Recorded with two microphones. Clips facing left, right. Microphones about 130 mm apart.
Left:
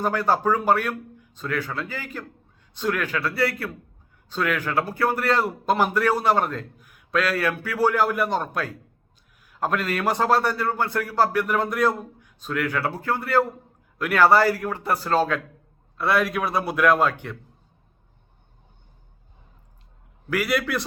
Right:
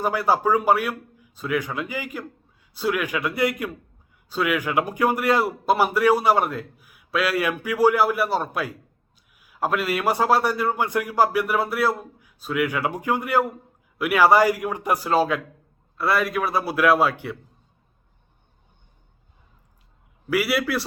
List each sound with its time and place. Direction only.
0.0 s a man's voice: 10° right (ahead or behind)
20.3 s a man's voice: 10° right (ahead or behind)